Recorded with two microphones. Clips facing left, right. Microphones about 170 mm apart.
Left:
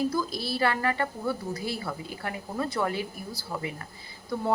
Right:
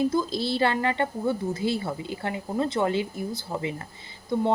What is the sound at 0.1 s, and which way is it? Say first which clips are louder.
Speech: right 4 dB; 25° right (ahead or behind).